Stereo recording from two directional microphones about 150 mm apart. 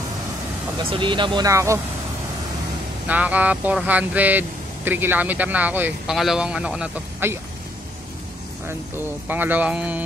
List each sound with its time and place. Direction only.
0.7 s speech: 35° right (ahead or behind)
3.1 s speech: 10° right (ahead or behind)
8.6 s speech: 15° right (ahead or behind)